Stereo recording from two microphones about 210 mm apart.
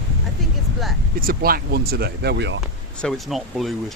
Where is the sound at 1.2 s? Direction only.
45° right (ahead or behind).